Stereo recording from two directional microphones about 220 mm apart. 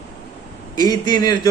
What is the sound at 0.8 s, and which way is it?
Speech, 15° left (ahead or behind).